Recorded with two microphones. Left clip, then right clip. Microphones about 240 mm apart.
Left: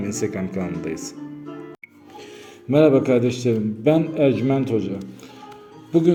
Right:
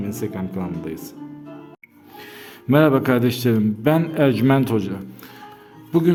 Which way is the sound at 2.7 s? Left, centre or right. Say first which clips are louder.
Left 1 dB; right.